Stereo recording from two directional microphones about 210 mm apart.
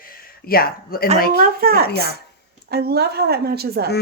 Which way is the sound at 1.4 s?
45° right (ahead or behind).